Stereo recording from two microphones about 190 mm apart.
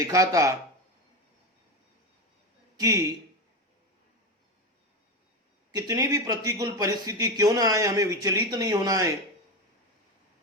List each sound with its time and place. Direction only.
0.0 s speech: 15° right (ahead or behind)
2.7 s a man's voice: 15° right (ahead or behind)
5.7 s speech: 20° right (ahead or behind)